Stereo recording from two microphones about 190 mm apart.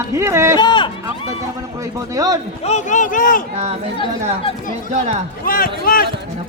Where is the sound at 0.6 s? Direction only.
25° left (ahead or behind).